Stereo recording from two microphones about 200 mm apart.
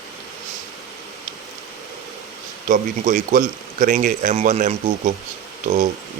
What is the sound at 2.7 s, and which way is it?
Speech, 40° right (ahead or behind).